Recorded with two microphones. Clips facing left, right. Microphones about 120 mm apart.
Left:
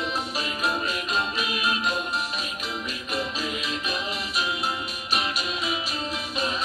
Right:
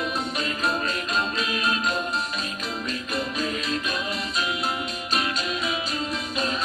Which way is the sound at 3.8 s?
20° left (ahead or behind).